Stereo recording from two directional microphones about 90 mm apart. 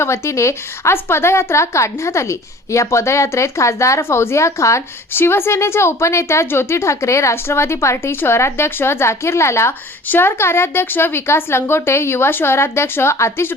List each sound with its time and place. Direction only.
0.0 s a woman's voice: 30° left (ahead or behind)